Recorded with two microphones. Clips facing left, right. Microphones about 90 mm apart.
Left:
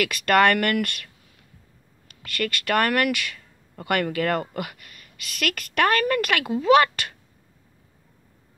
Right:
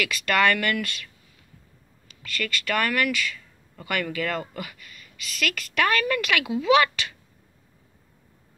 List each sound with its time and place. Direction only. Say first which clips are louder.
0.0 s speech: left 4 dB; 55° left (ahead or behind)
2.0 s speech: left 3 dB; 55° left (ahead or behind)